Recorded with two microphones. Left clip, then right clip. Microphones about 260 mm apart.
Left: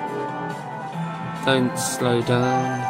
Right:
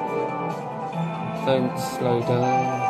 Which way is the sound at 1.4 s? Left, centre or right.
Left.